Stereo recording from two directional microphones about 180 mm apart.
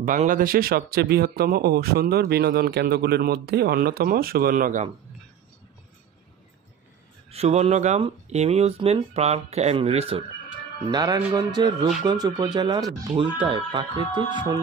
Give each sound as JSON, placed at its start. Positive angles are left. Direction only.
{"t": 0.0, "sound": "speech", "side_deg": -50}
{"t": 7.2, "sound": "speech", "side_deg": -35}
{"t": 10.9, "sound": "speech", "side_deg": -20}